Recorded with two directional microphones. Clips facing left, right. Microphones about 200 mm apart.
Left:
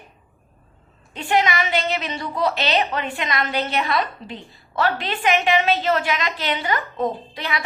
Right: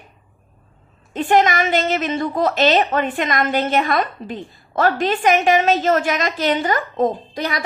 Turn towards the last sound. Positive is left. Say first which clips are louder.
# right 4 dB
turn(degrees=-40)  # may be behind; listen again after turning